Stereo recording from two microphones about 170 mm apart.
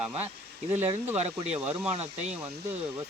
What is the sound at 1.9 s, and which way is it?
Speech, 40° right (ahead or behind).